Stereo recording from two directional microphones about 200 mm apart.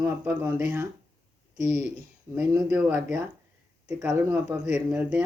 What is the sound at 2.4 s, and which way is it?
Speech, 10° right (ahead or behind).